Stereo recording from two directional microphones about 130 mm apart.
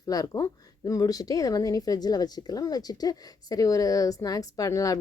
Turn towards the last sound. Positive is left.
turn(degrees=25)  # may be behind; listen again after turning